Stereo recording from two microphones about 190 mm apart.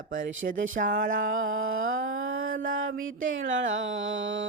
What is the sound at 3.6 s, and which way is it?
Music, 75° right (ahead or behind).